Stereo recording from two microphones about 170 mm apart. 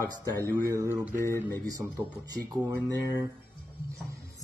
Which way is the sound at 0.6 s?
15° right (ahead or behind).